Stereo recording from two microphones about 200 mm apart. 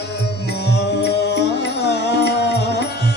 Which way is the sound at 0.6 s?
55° left (ahead or behind).